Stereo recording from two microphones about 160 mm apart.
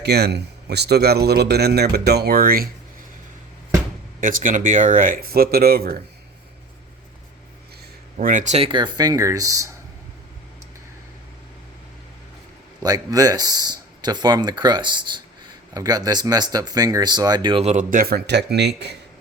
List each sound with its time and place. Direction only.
0.0 s speech: 90° right; by 2.6 s 70° right (ahead or behind)
4.2 s speech: 55° right (ahead or behind)
8.2 s speech: 55° right (ahead or behind)
8.5 s speech: 35° right (ahead or behind)
12.8 s speech: 25° right (ahead or behind)
17.6 s speech: 40° right (ahead or behind)
17.9 s speech: 75° right (ahead or behind); by 18.9 s 90° right